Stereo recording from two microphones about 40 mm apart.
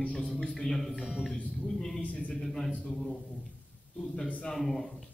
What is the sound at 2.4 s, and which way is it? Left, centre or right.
Speech, centre.